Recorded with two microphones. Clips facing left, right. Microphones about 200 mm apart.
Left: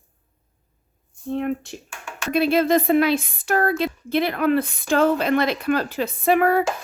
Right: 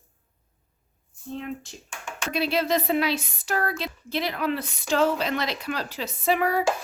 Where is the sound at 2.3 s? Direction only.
50° left (ahead or behind).